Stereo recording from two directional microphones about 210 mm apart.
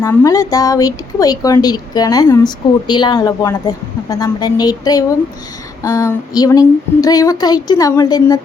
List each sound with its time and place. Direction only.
0.0 s a woman's voice: 15° left (ahead or behind)